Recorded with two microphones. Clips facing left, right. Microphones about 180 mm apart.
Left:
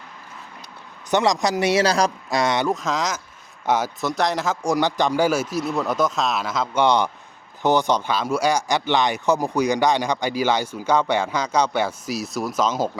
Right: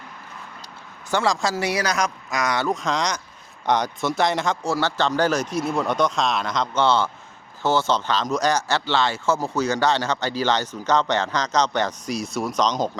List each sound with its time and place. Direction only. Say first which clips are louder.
1.1 s speech: left 3 dB; 20° left (ahead or behind)
2.6 s speech: even; centre (ahead or behind)
4.6 s speech: left 2 dB; 15° left (ahead or behind)
6.8 s speech: left 2 dB; 15° left (ahead or behind)